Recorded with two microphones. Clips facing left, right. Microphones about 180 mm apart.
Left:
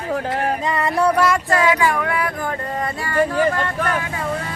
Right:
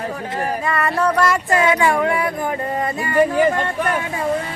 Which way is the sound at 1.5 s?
25° right (ahead or behind).